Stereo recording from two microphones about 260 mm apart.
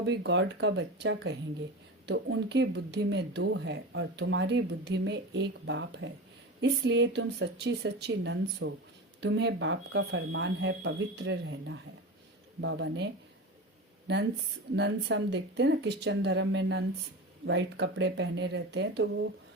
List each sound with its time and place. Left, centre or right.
0.0 s speech: right
14.1 s speech: right